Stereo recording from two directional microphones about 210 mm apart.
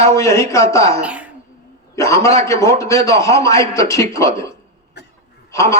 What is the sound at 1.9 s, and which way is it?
Speech, 15° left (ahead or behind).